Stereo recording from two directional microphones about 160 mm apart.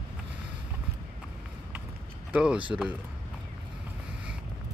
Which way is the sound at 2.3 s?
5° right (ahead or behind).